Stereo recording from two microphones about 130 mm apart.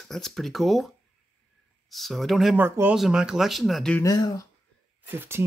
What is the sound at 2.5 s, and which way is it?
Speech, 15° right (ahead or behind).